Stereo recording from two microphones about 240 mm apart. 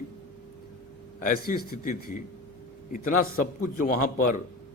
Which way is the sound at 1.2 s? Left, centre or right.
Left.